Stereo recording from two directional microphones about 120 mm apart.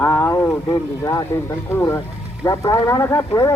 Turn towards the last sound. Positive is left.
turn(degrees=20)  # may be behind; listen again after turning